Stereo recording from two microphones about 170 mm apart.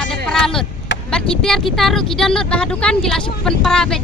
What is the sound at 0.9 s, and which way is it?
Vehicle, 90° left.